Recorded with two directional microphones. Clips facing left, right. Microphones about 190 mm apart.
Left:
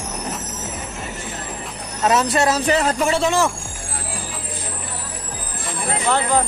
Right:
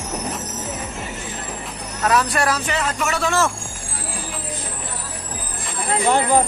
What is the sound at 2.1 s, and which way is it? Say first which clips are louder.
Speech: left 2 dB; 25° left (ahead or behind).